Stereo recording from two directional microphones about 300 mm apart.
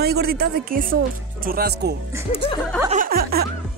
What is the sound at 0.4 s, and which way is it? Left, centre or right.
Speech, right.